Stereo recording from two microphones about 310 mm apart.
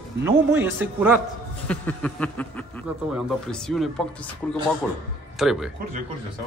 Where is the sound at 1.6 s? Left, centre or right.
Centre.